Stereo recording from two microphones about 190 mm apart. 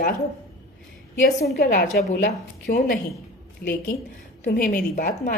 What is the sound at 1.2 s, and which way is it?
A woman's voice, 50° left (ahead or behind).